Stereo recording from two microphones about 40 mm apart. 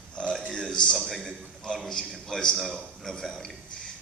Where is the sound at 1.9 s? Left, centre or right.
Centre.